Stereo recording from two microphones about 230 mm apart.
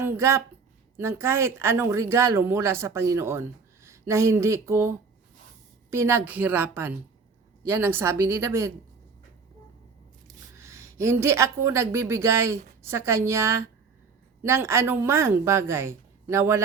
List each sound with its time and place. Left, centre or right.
0.0 s a woman's voice: centre
10.6 s a woman's voice: centre